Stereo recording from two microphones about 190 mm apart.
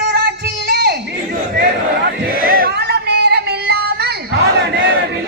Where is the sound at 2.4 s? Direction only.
50° right (ahead or behind).